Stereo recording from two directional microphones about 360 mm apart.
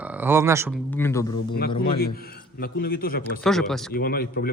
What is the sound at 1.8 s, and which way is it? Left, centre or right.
Speech, left.